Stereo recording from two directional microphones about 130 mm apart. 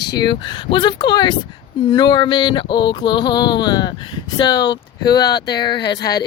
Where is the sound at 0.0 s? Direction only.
30° left (ahead or behind).